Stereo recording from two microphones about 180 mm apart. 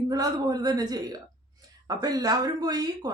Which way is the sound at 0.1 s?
20° right (ahead or behind).